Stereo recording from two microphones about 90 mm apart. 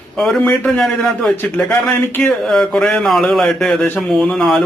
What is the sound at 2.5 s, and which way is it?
A man's voice, 5° left (ahead or behind).